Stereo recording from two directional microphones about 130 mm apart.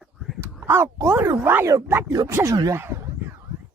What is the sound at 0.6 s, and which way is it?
Speech, 20° right (ahead or behind).